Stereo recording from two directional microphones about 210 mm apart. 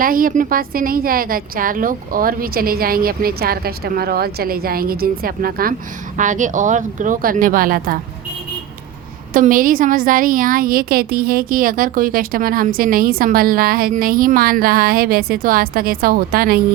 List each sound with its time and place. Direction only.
0.0 s a woman's voice: 40° right (ahead or behind)
9.3 s a woman's voice: 40° right (ahead or behind)